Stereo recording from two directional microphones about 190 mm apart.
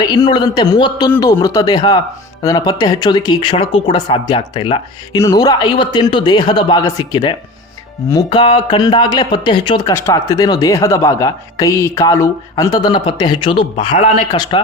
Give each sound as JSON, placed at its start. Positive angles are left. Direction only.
{"t": 0.0, "sound": "speech", "side_deg": 20}
{"t": 14.3, "sound": "speech", "side_deg": 20}